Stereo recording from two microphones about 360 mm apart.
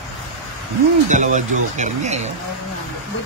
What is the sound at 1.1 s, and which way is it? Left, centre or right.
Speech, centre.